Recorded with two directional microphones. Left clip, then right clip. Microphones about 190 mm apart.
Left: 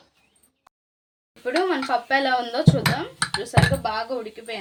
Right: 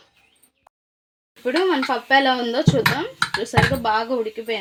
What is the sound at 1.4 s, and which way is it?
Speech, 35° right (ahead or behind).